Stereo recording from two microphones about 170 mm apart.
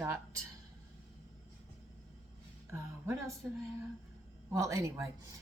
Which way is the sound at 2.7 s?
15° right (ahead or behind).